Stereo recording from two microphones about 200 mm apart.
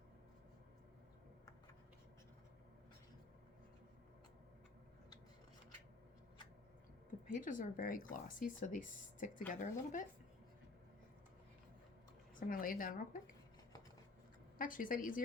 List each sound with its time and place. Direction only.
7.3 s speech: 40° left (ahead or behind)
12.4 s speech: 45° left (ahead or behind)
14.6 s speech: 45° left (ahead or behind)